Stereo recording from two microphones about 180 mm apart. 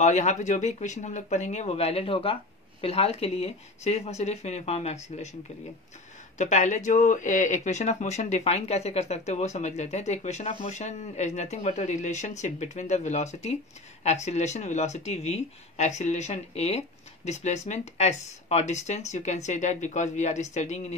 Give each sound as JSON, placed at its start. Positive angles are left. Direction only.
{"t": 0.0, "sound": "speech", "side_deg": 40}
{"t": 6.3, "sound": "speech", "side_deg": 40}